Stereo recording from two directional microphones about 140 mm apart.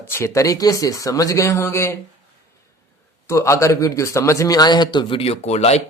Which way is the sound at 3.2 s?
20° left (ahead or behind).